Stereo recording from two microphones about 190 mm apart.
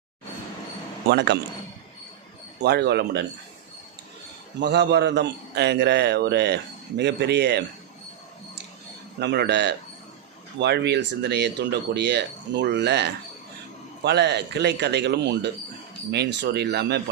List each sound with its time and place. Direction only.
1.1 s a man's voice: 65° right (ahead or behind)
2.6 s a man's voice: 60° right (ahead or behind)
4.6 s a man's voice: 65° right (ahead or behind)
9.1 s a man's voice: 60° right (ahead or behind)